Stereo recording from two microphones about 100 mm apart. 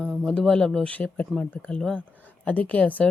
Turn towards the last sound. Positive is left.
turn(degrees=15)  # may be behind; listen again after turning